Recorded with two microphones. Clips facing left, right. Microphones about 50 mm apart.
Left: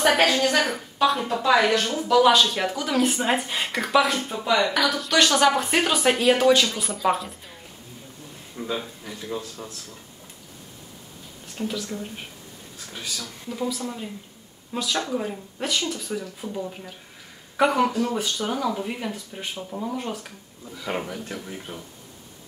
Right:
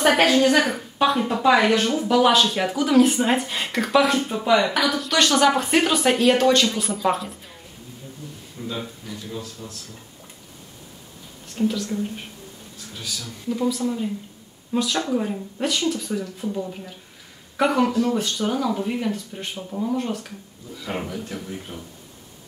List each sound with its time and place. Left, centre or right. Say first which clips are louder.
0.0 s a woman's voice: right 3 dB; centre
2.1 s speech: left 1 dB; centre
8.6 s a sound: left 2 dB; left
9.3 s a man's voice: left 4 dB; left
11.5 s speech: right 6 dB; centre
12.9 s a man's voice: even; left
13.5 s speech: right 6 dB; centre